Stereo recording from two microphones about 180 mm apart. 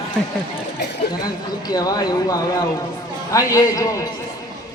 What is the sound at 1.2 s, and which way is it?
A man's voice, 20° left (ahead or behind).